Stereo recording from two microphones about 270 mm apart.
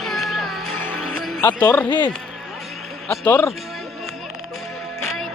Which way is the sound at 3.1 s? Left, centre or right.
Centre.